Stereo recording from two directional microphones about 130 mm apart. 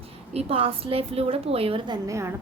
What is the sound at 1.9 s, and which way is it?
Speech, 25° right (ahead or behind).